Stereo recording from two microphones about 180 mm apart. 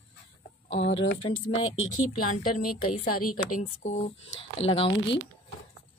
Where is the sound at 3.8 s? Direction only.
40° left (ahead or behind).